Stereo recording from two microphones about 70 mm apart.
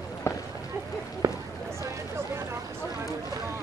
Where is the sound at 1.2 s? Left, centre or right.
Right.